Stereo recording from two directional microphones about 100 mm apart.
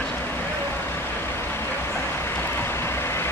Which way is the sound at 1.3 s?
25° left (ahead or behind).